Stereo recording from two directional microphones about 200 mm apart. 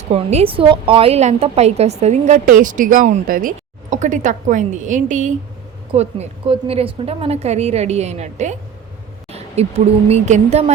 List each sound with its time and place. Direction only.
0.1 s a woman's voice: 30° right (ahead or behind)